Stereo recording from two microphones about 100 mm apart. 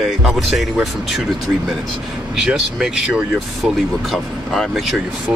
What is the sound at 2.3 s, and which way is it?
Speech, 5° right (ahead or behind).